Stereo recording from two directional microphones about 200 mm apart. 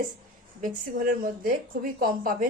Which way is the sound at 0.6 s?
45° right (ahead or behind).